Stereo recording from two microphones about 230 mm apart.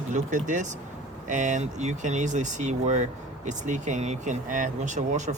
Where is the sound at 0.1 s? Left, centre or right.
Right.